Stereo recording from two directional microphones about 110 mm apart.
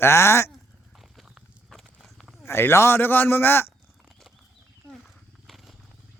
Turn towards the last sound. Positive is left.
turn(degrees=0)  # may be behind; listen again after turning